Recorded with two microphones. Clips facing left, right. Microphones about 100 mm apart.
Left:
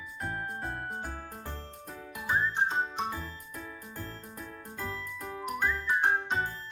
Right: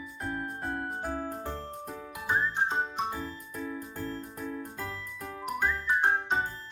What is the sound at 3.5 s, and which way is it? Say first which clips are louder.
Music: right 6 dB; centre (ahead or behind).